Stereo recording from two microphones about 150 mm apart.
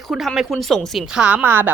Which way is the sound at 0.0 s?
Centre (ahead or behind).